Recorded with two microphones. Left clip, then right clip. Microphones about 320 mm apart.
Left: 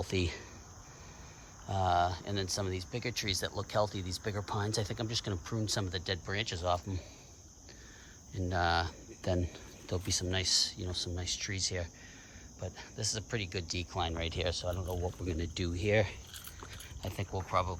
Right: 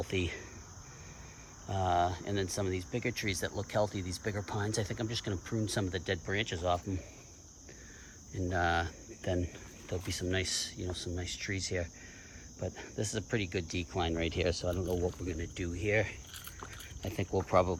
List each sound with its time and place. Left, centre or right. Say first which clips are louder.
0.0 s speech: even; centre
1.6 s speech: left 1 dB; centre
8.4 s speech: even; centre
15.9 s a sound: left 1 dB; centre